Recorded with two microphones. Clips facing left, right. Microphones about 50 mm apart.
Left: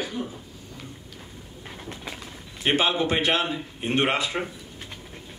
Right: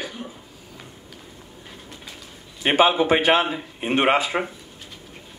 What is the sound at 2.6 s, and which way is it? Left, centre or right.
A man's voice, right.